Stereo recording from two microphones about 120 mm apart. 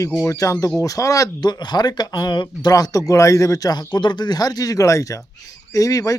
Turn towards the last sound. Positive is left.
turn(degrees=30)  # may be behind; listen again after turning